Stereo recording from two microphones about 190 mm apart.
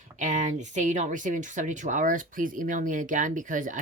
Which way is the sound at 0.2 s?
40° right (ahead or behind).